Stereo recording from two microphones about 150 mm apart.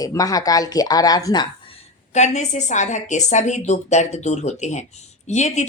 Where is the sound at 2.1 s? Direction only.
50° left (ahead or behind).